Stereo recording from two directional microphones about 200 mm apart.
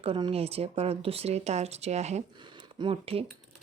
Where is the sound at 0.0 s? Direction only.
25° right (ahead or behind).